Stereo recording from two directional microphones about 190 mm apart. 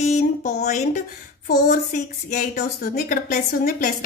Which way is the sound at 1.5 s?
50° left (ahead or behind).